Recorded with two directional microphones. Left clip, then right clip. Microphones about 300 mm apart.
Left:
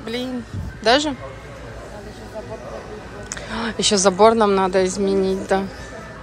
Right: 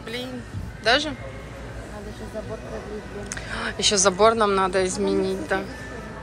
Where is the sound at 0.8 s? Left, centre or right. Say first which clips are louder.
Left 4 dB; centre.